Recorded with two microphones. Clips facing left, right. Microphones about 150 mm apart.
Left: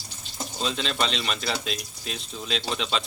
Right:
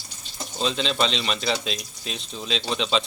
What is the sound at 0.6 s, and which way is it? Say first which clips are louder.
Speech: right 4 dB; centre (ahead or behind).